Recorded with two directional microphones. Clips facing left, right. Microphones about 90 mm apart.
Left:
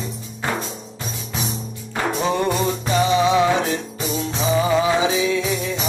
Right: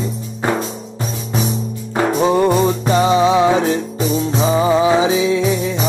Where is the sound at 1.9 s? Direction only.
35° right (ahead or behind).